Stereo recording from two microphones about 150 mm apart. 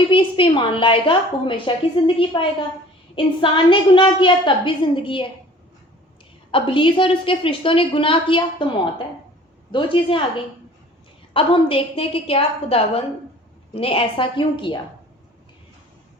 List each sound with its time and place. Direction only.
0.1 s a woman's voice: 35° left (ahead or behind)
6.5 s a woman's voice: 35° left (ahead or behind)
9.7 s a woman's voice: 35° left (ahead or behind)
11.3 s a woman's voice: 35° left (ahead or behind)